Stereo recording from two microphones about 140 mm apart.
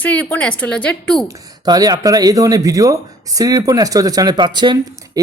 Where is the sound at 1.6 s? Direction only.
25° right (ahead or behind).